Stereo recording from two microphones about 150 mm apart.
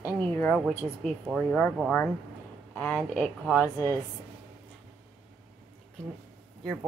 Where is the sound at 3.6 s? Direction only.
20° left (ahead or behind).